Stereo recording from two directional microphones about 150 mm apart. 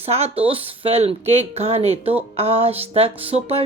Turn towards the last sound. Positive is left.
turn(degrees=-40)  # may be behind; listen again after turning